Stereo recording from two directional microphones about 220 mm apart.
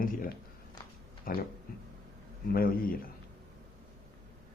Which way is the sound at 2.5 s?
40° left (ahead or behind).